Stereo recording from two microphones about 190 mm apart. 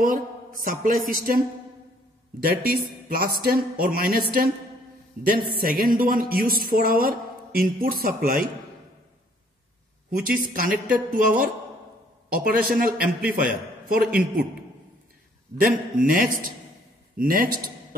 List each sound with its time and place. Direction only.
0.0 s speech: 45° right (ahead or behind)
3.1 s speech: 50° right (ahead or behind)
10.1 s a man's voice: 50° right (ahead or behind)
14.0 s a man's voice: 5° right (ahead or behind)
15.6 s speech: 50° right (ahead or behind)